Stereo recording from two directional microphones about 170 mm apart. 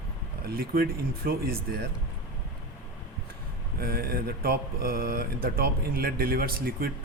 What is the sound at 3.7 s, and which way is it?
Speech, 65° right (ahead or behind).